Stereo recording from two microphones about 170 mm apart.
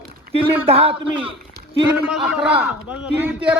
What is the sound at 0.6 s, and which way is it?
Speech, 35° right (ahead or behind).